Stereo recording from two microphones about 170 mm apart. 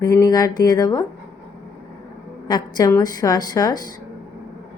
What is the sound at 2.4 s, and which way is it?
A woman's voice, 25° left (ahead or behind).